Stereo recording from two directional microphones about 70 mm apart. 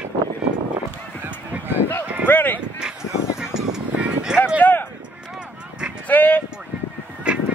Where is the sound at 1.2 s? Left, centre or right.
Right.